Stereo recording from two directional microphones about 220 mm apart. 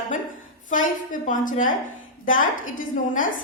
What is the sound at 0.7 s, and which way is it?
A man's voice, 35° left (ahead or behind).